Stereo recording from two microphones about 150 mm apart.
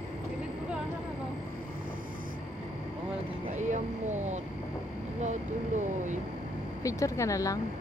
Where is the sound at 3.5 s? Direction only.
55° right (ahead or behind).